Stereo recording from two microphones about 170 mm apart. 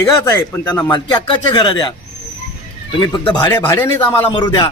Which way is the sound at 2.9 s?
25° left (ahead or behind).